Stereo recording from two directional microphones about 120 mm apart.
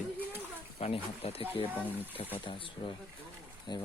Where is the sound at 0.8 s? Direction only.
55° left (ahead or behind).